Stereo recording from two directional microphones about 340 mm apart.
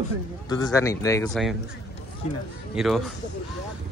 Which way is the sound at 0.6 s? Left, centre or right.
Centre.